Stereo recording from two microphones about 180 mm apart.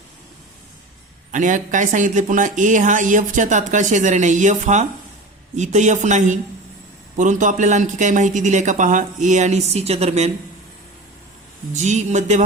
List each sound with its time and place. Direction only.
1.3 s speech: 45° right (ahead or behind)
11.7 s speech: 40° right (ahead or behind)